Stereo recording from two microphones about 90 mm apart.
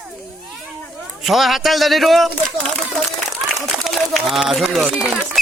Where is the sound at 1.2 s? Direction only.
Centre (ahead or behind).